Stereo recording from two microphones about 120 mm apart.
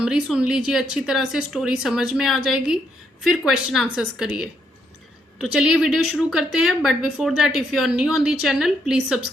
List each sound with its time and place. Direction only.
0.0 s a woman's voice: 5° right (ahead or behind)
5.5 s speech: 5° right (ahead or behind)